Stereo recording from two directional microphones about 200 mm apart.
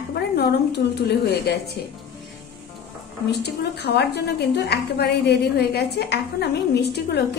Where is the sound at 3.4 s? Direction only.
55° left (ahead or behind).